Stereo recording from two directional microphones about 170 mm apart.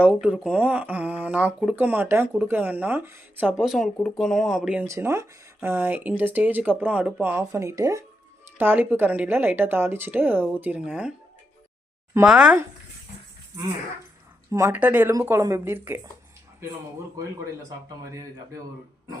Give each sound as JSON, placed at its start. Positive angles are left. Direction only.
{"t": 0.0, "sound": "speech", "side_deg": -5}
{"t": 4.9, "sound": "speech", "side_deg": -15}
{"t": 12.2, "sound": "speech", "side_deg": -5}
{"t": 14.5, "sound": "speech", "side_deg": -15}
{"t": 18.1, "sound": "speech", "side_deg": -15}